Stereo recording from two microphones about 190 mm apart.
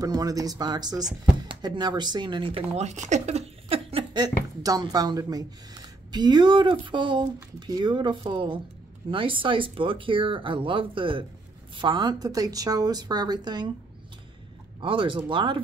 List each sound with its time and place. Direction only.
0.0 s speech: 20° right (ahead or behind)
14.8 s speech: 25° right (ahead or behind)